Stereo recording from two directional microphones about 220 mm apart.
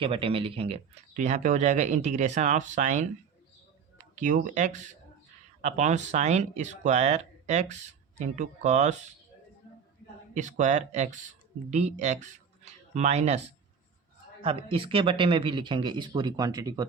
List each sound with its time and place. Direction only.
0.0 s speech: 25° right (ahead or behind)
10.3 s speech: 35° right (ahead or behind)
14.4 s speech: 25° right (ahead or behind)